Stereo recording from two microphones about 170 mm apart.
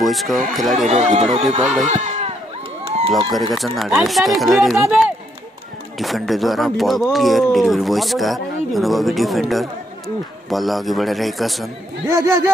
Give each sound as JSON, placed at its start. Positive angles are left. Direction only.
{"t": 0.0, "sound": "speech", "side_deg": 0}
{"t": 0.8, "sound": "speech", "side_deg": -40}
{"t": 1.9, "sound": "a sound", "side_deg": -40}
{"t": 3.5, "sound": "speech", "side_deg": 0}
{"t": 12.1, "sound": "speech", "side_deg": -20}